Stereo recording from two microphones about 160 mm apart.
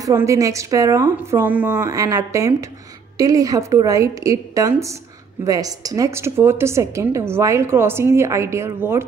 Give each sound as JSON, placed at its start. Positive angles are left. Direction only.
{"t": 0.0, "sound": "a woman's voice", "side_deg": -20}
{"t": 1.1, "sound": "a woman's voice", "side_deg": -10}
{"t": 1.9, "sound": "a woman's voice", "side_deg": -20}